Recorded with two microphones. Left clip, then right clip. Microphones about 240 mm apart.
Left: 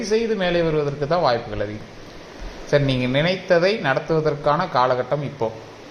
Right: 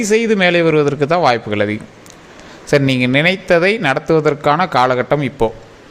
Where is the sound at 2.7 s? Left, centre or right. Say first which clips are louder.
Right 6 dB; right.